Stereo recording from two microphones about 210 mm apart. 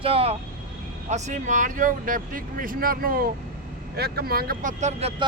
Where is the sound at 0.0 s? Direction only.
25° right (ahead or behind).